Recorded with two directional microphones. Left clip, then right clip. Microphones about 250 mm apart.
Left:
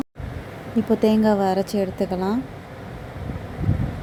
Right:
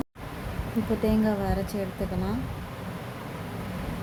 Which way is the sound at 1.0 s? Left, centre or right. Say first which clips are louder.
Left 9 dB; left.